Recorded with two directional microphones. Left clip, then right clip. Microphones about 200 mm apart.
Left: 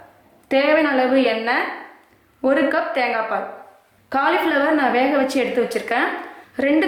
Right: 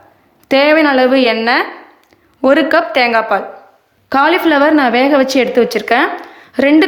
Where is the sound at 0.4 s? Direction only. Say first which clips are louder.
Right 7 dB; 55° right (ahead or behind).